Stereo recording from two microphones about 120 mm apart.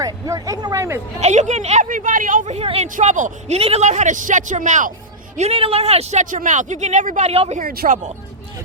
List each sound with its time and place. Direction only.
0.0 s speech: 30° right (ahead or behind)
1.2 s speech: 75° right (ahead or behind)
3.6 s a man's voice: 65° right (ahead or behind); by 4.9 s 90° right
5.4 s speech: 55° right (ahead or behind); by 8.1 s 75° right (ahead or behind)